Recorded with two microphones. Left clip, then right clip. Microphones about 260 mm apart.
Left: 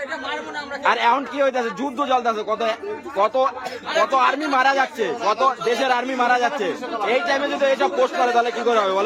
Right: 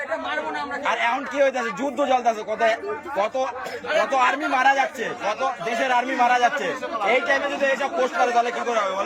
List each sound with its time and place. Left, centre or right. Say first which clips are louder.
0.9 s a man's voice: left 6 dB; centre
4.1 s a man's voice: left 3 dB; centre
7.1 s a man's voice: even; left